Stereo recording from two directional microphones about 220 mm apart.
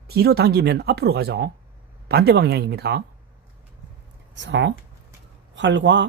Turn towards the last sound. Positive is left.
turn(degrees=-55)  # may be behind; listen again after turning